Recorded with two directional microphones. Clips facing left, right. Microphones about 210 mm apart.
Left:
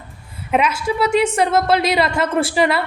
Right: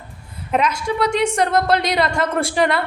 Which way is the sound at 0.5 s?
5° left (ahead or behind).